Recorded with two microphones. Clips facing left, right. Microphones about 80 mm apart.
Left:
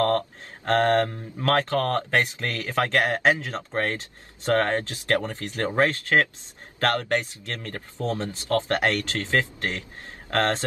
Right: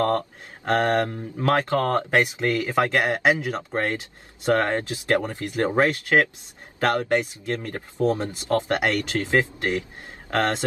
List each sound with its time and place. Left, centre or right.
0.7 s speech: centre